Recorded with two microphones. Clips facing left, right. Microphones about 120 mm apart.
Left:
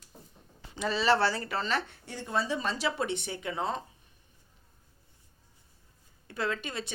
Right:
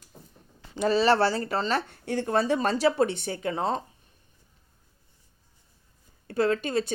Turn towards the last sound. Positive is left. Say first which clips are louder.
# right 9 dB
turn(degrees=-40)  # may be behind; listen again after turning